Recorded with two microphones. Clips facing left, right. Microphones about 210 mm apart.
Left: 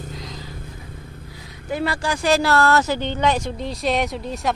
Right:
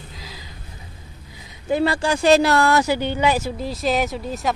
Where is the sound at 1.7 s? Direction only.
25° right (ahead or behind); by 4.5 s centre (ahead or behind).